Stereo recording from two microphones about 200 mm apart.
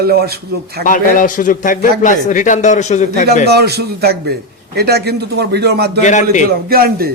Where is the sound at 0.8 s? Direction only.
40° left (ahead or behind).